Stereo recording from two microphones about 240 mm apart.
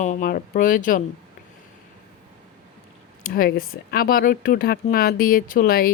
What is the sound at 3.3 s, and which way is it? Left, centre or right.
Speech, left.